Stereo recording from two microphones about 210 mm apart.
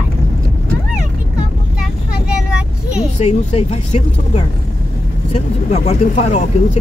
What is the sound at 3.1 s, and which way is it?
Speech, 30° left (ahead or behind).